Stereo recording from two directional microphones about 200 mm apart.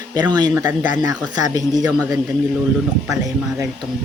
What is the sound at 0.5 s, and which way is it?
Speech, 10° right (ahead or behind).